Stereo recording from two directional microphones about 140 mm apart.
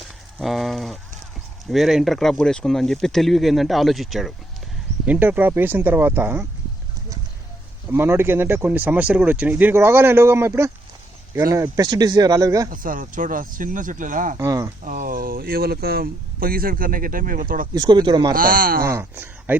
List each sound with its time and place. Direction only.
0.0 s a sound: centre (ahead or behind)
1.7 s speech: centre (ahead or behind)
5.0 s speech: 10° right (ahead or behind)
7.9 s speech: 15° right (ahead or behind)
12.7 s speech: 75° right (ahead or behind)
14.3 s speech: 25° right (ahead or behind)
14.8 s speech: 80° right
17.7 s speech: 30° right (ahead or behind)
18.3 s speech: 90° right
18.9 s speech: 15° right (ahead or behind)